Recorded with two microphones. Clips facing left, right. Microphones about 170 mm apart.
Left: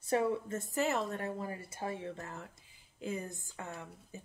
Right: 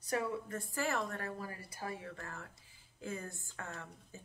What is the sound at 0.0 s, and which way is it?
A woman's voice, 25° left (ahead or behind).